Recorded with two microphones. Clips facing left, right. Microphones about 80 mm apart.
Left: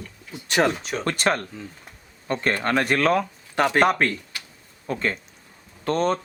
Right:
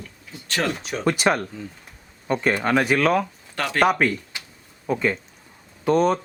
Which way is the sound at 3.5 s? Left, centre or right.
Left.